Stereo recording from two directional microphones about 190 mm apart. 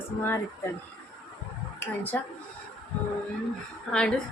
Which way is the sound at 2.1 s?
10° left (ahead or behind).